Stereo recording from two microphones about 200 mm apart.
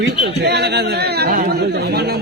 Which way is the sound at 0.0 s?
55° right (ahead or behind).